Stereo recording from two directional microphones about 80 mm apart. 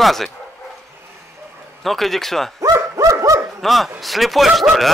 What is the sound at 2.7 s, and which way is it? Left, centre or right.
Bow-wow, right.